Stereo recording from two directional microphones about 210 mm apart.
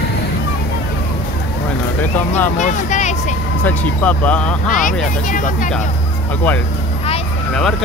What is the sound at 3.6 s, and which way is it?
Speech, 5° left (ahead or behind).